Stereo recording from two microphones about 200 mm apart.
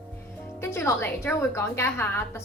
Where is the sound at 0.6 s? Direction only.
15° left (ahead or behind).